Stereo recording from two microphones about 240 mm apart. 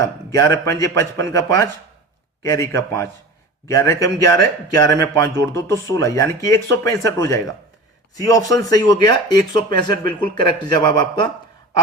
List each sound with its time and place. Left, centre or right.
0.0 s speech: centre